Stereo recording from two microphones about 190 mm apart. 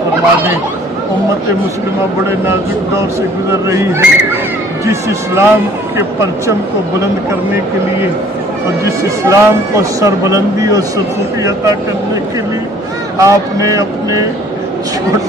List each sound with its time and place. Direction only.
3.6 s speech: 15° right (ahead or behind)
8.8 s speech: 15° right (ahead or behind)
13.2 s speech: 15° right (ahead or behind)